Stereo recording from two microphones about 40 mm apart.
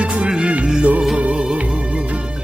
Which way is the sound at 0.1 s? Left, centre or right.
Right.